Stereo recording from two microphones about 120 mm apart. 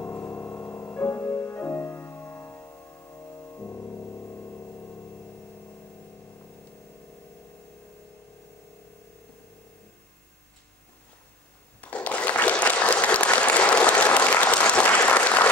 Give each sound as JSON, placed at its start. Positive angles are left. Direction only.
{"t": 0.0, "sound": "music", "side_deg": 15}
{"t": 11.8, "sound": "applause", "side_deg": 10}